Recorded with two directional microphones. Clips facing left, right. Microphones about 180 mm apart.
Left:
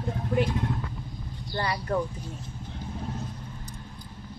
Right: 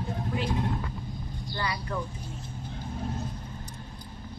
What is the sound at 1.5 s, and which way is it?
Speech, 45° left (ahead or behind).